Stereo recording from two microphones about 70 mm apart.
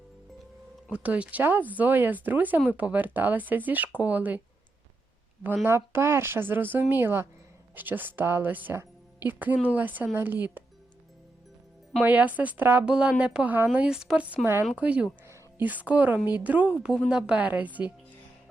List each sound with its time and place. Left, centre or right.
0.9 s speech: centre
5.6 s speech: right
12.0 s speech: right
12.8 s speech: centre
14.4 s speech: right
14.7 s speech: centre